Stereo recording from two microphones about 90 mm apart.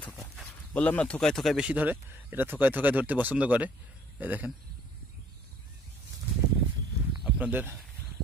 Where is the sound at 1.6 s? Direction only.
15° right (ahead or behind).